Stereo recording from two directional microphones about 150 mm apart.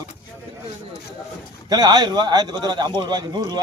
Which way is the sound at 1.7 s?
25° right (ahead or behind).